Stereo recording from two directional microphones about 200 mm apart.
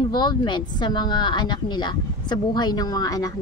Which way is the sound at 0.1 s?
20° left (ahead or behind).